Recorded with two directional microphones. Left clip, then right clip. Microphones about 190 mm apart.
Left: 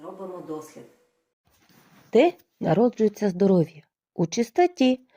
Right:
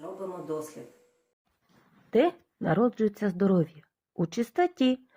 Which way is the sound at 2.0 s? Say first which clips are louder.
Left 5 dB; 25° left (ahead or behind).